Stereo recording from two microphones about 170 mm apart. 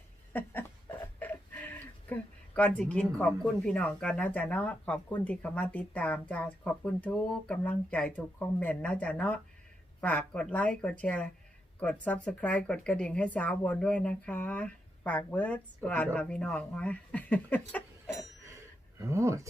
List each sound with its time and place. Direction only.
0.3 s a sound: 10° left (ahead or behind)
1.2 s speech: 10° left (ahead or behind)
18.9 s speech: 15° right (ahead or behind)